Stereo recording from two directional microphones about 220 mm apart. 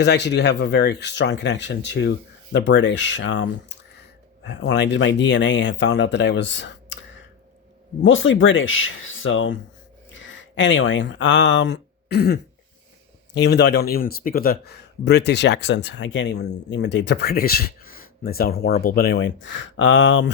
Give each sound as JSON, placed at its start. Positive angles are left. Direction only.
{"t": 0.0, "sound": "speech", "side_deg": 50}
{"t": 8.0, "sound": "speech", "side_deg": 60}